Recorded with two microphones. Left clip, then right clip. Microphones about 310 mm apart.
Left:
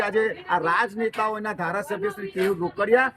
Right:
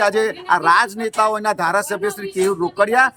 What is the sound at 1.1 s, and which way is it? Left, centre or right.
Speech, centre.